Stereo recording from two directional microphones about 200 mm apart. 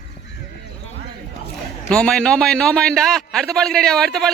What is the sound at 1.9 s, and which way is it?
A man's voice, 5° left (ahead or behind).